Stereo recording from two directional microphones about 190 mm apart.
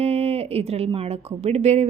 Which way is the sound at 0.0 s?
30° right (ahead or behind).